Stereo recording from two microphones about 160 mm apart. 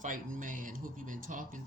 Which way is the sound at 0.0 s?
55° right (ahead or behind).